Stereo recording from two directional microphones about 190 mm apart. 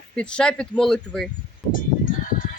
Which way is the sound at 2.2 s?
45° left (ahead or behind).